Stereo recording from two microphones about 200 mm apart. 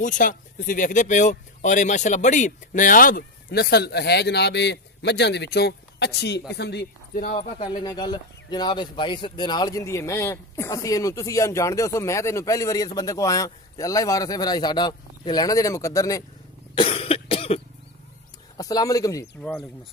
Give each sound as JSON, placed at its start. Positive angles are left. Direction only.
{"t": 0.0, "sound": "speech", "side_deg": 40}
{"t": 7.3, "sound": "speech", "side_deg": 25}
{"t": 16.7, "sound": "cough", "side_deg": 25}
{"t": 18.6, "sound": "speech", "side_deg": 15}